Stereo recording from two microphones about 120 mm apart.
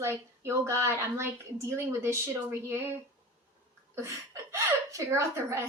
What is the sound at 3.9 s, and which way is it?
A woman's voice, 20° right (ahead or behind).